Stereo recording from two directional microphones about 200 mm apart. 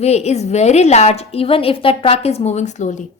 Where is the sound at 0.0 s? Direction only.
35° left (ahead or behind).